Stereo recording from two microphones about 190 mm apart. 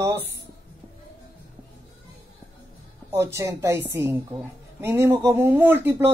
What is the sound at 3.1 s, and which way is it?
Speech, 15° right (ahead or behind).